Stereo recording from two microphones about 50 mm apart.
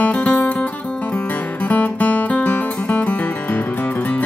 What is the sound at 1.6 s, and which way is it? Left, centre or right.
Music, left.